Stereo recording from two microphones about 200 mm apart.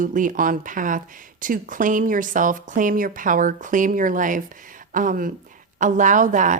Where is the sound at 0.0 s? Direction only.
40° right (ahead or behind).